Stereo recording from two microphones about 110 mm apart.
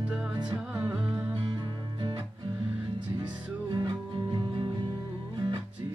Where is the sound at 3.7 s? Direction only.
45° right (ahead or behind).